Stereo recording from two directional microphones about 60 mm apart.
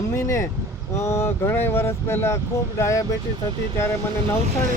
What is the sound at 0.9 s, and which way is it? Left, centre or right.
Speech, left.